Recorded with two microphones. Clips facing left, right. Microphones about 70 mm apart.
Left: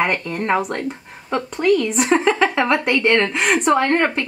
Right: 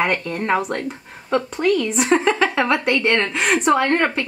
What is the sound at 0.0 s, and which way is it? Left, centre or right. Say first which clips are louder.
A woman's voice: even; centre.